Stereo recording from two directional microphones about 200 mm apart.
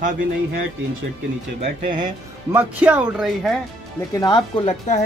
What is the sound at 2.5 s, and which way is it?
Speech, 10° right (ahead or behind).